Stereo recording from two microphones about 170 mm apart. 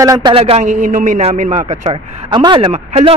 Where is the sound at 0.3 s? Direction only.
35° right (ahead or behind).